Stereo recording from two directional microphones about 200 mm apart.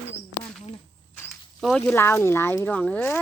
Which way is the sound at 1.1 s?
5° left (ahead or behind).